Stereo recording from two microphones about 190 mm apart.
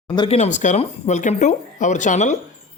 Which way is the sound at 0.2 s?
35° left (ahead or behind).